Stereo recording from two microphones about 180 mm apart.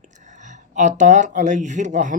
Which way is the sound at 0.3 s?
40° right (ahead or behind).